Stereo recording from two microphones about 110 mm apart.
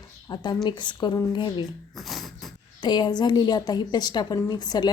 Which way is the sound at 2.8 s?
45° left (ahead or behind).